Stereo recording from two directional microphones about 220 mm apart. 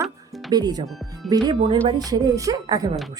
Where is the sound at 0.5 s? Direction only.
20° right (ahead or behind).